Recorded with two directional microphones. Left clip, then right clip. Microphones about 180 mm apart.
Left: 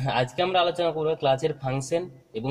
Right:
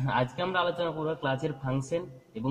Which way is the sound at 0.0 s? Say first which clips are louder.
Left 4 dB; 45° left (ahead or behind).